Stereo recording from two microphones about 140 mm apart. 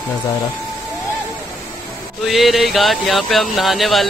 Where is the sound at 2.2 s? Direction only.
Centre (ahead or behind).